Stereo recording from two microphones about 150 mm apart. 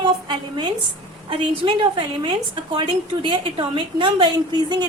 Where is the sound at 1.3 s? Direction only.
35° right (ahead or behind).